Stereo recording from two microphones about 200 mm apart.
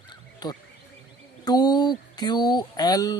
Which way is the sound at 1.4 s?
20° left (ahead or behind).